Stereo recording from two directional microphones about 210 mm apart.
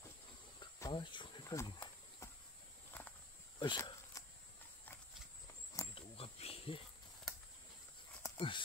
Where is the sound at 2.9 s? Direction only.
5° left (ahead or behind).